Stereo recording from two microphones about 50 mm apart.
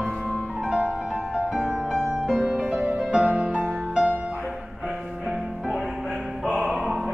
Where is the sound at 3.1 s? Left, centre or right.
Centre.